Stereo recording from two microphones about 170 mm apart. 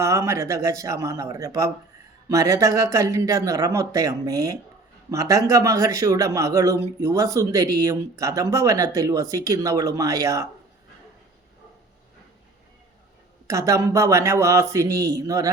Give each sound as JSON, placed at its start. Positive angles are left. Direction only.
{"t": 0.0, "sound": "speech", "side_deg": -15}
{"t": 13.5, "sound": "speech", "side_deg": -20}